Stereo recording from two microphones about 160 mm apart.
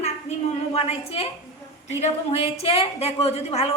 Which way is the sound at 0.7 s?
40° left (ahead or behind).